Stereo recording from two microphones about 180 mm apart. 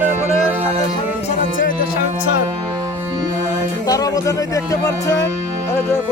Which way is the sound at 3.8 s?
20° left (ahead or behind).